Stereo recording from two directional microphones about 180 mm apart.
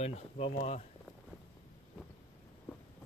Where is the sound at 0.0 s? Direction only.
35° left (ahead or behind).